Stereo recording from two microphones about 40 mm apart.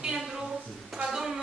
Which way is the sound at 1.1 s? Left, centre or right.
Centre.